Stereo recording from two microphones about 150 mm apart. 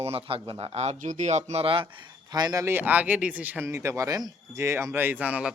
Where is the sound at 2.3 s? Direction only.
25° right (ahead or behind).